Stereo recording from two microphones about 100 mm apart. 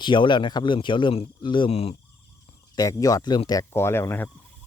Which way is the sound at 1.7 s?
80° left.